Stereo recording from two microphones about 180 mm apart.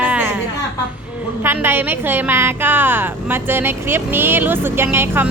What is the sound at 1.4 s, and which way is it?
A woman's voice, 10° right (ahead or behind).